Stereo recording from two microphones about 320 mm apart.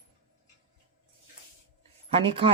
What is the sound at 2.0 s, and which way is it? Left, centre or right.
Speech, centre.